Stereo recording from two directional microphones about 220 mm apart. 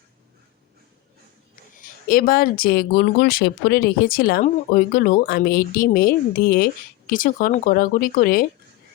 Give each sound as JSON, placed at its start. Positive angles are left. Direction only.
{"t": 2.0, "sound": "speech", "side_deg": 40}